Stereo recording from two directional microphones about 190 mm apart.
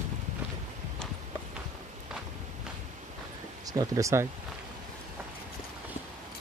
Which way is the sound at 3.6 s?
20° right (ahead or behind).